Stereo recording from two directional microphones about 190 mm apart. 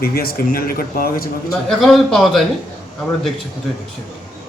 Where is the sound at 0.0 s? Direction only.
50° left (ahead or behind).